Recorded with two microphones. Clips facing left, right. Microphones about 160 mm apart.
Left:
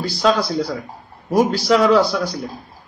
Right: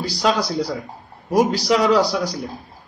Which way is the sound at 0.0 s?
15° right (ahead or behind).